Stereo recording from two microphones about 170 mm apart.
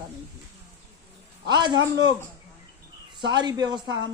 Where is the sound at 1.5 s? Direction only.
25° right (ahead or behind).